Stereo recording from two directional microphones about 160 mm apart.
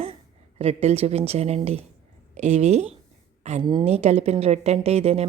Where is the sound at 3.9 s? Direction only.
40° right (ahead or behind).